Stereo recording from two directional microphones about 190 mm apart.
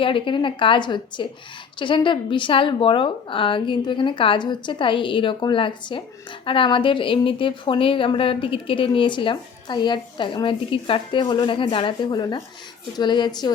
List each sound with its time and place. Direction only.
0.0 s speech: 25° left (ahead or behind)